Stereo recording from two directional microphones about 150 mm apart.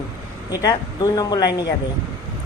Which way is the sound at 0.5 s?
25° left (ahead or behind).